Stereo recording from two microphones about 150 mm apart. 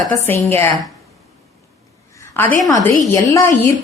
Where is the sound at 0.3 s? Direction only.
15° left (ahead or behind).